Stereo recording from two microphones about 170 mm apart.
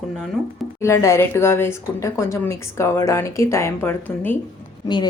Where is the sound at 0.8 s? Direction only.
15° left (ahead or behind).